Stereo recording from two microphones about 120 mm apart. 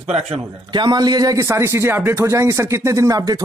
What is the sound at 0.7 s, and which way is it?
A man's voice, 35° right (ahead or behind).